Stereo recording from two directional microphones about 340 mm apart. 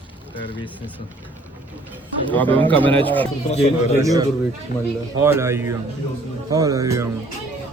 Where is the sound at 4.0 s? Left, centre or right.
Centre.